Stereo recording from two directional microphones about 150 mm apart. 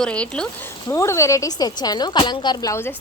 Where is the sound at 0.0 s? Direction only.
5° left (ahead or behind).